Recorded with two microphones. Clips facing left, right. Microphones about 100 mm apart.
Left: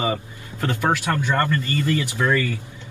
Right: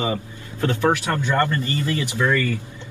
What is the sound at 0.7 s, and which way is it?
Speech, 20° right (ahead or behind).